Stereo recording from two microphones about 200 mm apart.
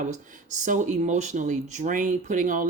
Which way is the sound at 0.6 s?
40° right (ahead or behind).